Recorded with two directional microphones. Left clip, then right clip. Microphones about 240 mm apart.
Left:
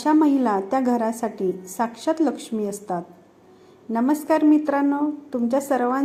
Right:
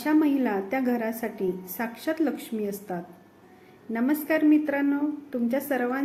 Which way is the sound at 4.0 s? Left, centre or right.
Centre.